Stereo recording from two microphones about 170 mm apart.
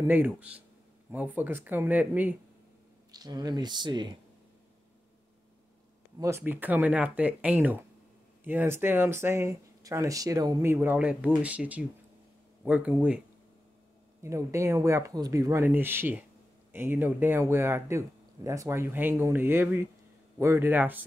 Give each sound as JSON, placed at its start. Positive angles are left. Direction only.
{"t": 0.0, "sound": "speech", "side_deg": -10}
{"t": 3.1, "sound": "speech", "side_deg": -25}
{"t": 6.1, "sound": "speech", "side_deg": -15}
{"t": 14.2, "sound": "speech", "side_deg": -15}